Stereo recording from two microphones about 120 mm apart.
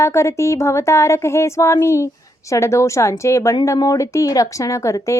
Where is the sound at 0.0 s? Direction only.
25° left (ahead or behind).